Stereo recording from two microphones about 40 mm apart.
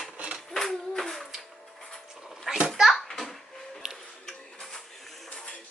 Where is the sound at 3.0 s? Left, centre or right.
Centre.